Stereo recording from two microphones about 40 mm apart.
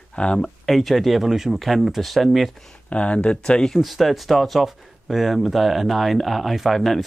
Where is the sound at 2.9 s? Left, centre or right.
Left.